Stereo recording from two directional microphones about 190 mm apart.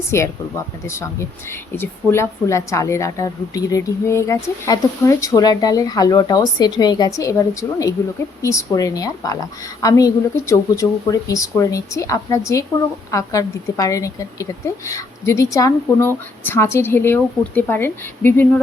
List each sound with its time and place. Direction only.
0.1 s a woman's voice: 15° left (ahead or behind)